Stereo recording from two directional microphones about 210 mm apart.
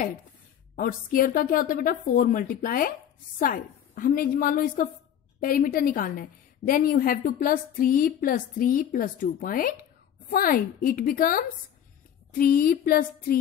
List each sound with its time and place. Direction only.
0.7 s a woman's voice: 40° left (ahead or behind)